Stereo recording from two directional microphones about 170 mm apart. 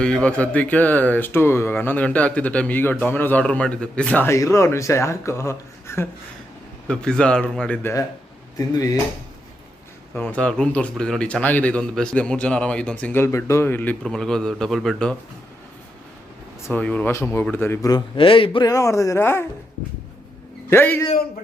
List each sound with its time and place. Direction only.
0.0 s speech: 5° left (ahead or behind)
6.8 s speech: 5° left (ahead or behind); by 9.0 s 20° left (ahead or behind)
10.2 s speech: 5° left (ahead or behind)
16.6 s speech: 10° left (ahead or behind)
18.2 s speech: 30° left (ahead or behind); by 19.5 s 15° left (ahead or behind)
20.7 s speech: 15° left (ahead or behind)